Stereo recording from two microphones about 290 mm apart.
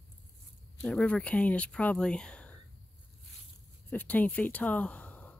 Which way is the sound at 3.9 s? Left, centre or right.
Centre.